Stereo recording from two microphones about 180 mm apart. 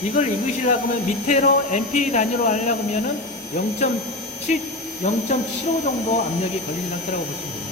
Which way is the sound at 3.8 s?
45° left (ahead or behind).